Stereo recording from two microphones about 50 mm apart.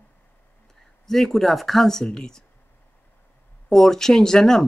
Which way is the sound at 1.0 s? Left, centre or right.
Centre.